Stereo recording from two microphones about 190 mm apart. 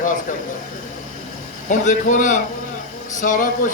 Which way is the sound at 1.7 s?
40° left (ahead or behind).